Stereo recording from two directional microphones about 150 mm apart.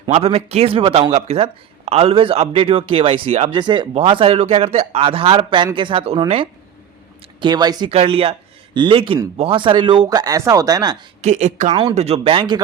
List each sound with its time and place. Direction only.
0.1 s speech: 40° right (ahead or behind)
3.5 s speech: 30° right (ahead or behind)
7.9 s speech: 40° right (ahead or behind); by 10.9 s 25° right (ahead or behind)
11.2 s a woman's voice: 50° right (ahead or behind)
11.7 s speech: 30° right (ahead or behind)
11.9 s speech: 45° right (ahead or behind)